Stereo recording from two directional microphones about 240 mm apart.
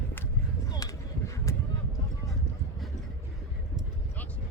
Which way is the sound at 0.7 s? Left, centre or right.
Centre.